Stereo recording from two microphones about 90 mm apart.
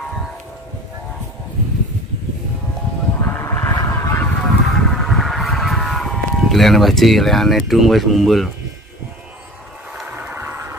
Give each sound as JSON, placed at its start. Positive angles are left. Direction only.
{"t": 3.2, "sound": "honk", "side_deg": 25}
{"t": 4.5, "sound": "vehicle", "side_deg": 5}
{"t": 10.0, "sound": "a sound", "side_deg": -20}